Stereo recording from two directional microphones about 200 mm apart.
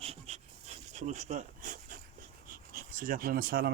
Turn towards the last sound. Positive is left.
turn(degrees=-50)  # may be behind; listen again after turning